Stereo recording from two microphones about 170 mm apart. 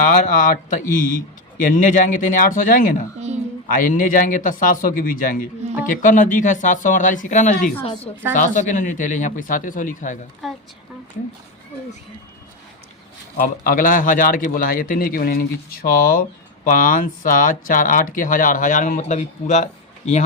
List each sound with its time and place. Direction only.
0.2 s speech: 50° left (ahead or behind)
10.4 s speech: centre (ahead or behind)
13.3 s speech: 55° left (ahead or behind)